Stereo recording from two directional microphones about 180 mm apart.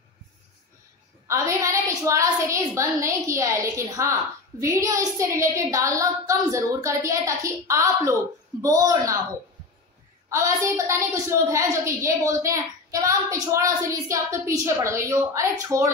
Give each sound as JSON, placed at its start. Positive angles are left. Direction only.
{"t": 1.2, "sound": "a woman's voice", "side_deg": -15}
{"t": 10.3, "sound": "a woman's voice", "side_deg": -15}